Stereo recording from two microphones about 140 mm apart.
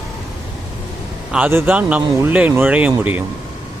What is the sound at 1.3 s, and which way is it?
Speech, 10° right (ahead or behind).